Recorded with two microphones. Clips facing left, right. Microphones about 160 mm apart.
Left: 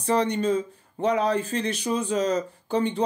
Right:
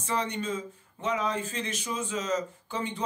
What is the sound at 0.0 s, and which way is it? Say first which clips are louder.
Speech: left 8 dB; 35° left (ahead or behind).